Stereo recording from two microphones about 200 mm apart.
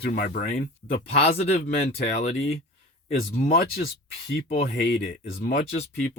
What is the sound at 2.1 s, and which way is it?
Speech, 35° left (ahead or behind).